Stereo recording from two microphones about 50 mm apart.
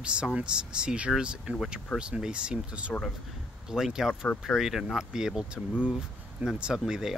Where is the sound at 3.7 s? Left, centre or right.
Centre.